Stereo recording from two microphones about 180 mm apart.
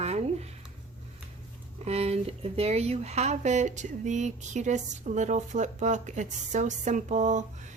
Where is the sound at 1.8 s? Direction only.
35° right (ahead or behind).